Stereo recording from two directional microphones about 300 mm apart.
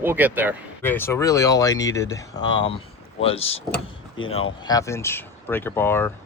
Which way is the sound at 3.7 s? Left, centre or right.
Left.